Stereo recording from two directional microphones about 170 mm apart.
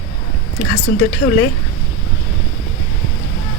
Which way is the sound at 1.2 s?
90° left.